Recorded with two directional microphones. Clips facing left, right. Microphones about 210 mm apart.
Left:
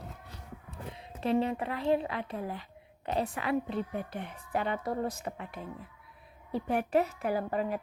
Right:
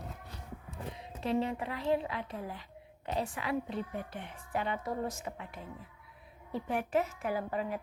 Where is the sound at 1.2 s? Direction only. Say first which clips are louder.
Left 3 dB; 60° left (ahead or behind).